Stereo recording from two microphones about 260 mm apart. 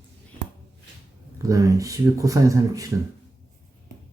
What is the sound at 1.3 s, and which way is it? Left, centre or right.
Speech, centre.